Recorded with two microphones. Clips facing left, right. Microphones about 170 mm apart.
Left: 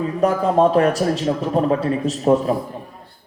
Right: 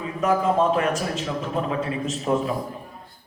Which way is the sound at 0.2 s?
35° left (ahead or behind).